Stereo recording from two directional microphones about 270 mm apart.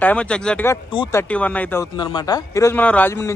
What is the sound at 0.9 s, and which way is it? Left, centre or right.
Speech, centre.